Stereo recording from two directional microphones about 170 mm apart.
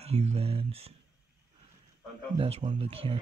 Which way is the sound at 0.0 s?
40° right (ahead or behind).